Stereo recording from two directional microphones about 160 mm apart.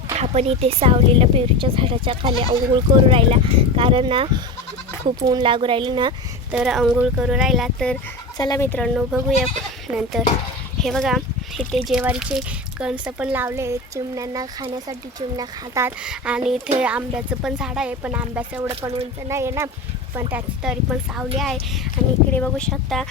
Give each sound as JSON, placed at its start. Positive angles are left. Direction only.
{"t": 0.1, "sound": "speech", "side_deg": -40}
{"t": 6.5, "sound": "speech", "side_deg": -5}
{"t": 8.4, "sound": "speech", "side_deg": 20}
{"t": 9.0, "sound": "speech", "side_deg": -5}
{"t": 16.0, "sound": "speech", "side_deg": -5}
{"t": 20.3, "sound": "speech", "side_deg": -5}